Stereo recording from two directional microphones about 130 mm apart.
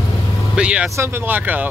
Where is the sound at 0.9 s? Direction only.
20° right (ahead or behind).